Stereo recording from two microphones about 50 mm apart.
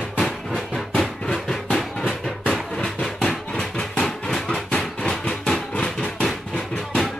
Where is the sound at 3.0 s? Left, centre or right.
Centre.